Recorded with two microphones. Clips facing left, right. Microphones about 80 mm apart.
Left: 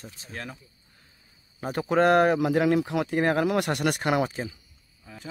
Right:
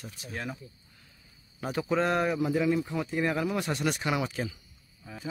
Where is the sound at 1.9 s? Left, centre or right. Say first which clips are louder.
Left 8 dB; left.